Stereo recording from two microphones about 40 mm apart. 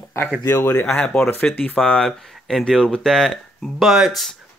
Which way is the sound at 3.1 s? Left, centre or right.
Centre.